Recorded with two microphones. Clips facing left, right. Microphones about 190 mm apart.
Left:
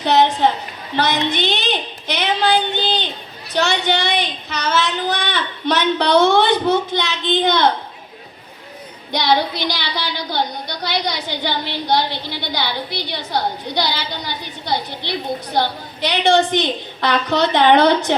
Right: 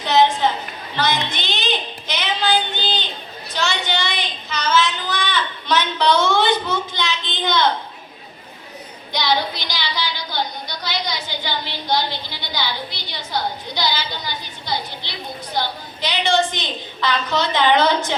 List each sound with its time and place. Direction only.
0.0 s a woman's voice: 60° left (ahead or behind)
3.5 s a sound: 60° left (ahead or behind)
9.1 s a woman's voice: 60° left (ahead or behind)